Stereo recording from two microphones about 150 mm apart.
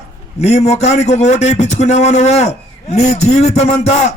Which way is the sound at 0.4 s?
45° left (ahead or behind).